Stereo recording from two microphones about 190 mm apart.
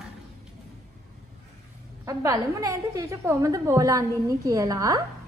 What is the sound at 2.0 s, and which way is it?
A woman's voice, 20° right (ahead or behind).